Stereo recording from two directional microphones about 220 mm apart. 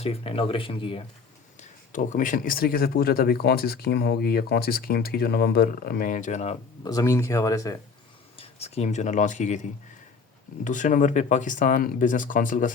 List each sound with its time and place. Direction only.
0.0 s speech: 25° left (ahead or behind)
1.9 s speech: 35° left (ahead or behind)
6.8 s speech: 15° left (ahead or behind)
8.4 s speech: 30° left (ahead or behind)